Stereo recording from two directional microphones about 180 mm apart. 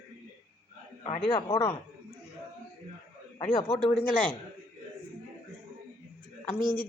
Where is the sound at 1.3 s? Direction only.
25° left (ahead or behind).